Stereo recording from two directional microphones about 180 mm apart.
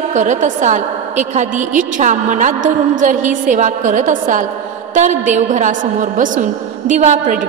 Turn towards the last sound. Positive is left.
turn(degrees=-40)  # may be behind; listen again after turning